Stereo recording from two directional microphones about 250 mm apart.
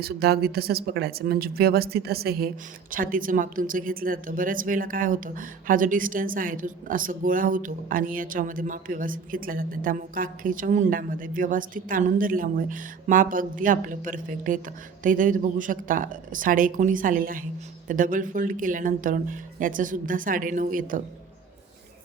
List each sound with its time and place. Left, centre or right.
0.0 s a woman's voice: right